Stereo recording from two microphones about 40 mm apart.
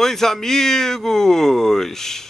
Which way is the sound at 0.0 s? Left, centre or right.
Centre.